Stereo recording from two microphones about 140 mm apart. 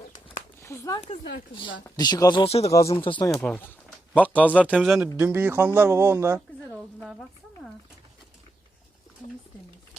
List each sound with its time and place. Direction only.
0.6 s speech: 25° left (ahead or behind)
1.5 s speech: 35° left (ahead or behind)
3.3 s a man's voice: 10° left (ahead or behind)
5.1 s speech: 10° right (ahead or behind)
7.0 s speech: centre (ahead or behind)